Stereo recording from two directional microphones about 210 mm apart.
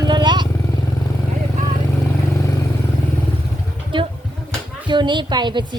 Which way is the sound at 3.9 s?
25° right (ahead or behind).